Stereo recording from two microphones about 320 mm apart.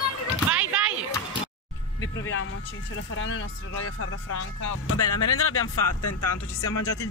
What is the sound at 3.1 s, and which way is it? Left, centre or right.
Speech, left.